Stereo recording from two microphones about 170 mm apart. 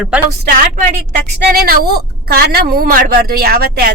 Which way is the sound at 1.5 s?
65° right (ahead or behind).